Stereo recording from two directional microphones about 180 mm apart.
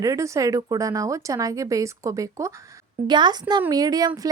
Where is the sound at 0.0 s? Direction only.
20° right (ahead or behind).